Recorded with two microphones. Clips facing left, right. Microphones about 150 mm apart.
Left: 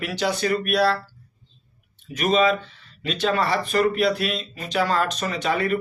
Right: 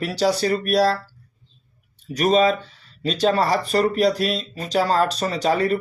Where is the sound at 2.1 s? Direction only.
40° right (ahead or behind).